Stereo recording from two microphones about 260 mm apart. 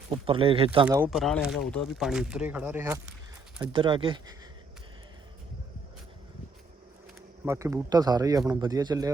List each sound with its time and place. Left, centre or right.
0.3 s speech: right
0.9 s a man's voice: centre
7.4 s a man's voice: centre